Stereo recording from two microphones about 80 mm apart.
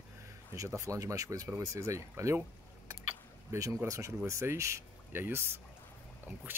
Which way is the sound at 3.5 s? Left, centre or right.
Right.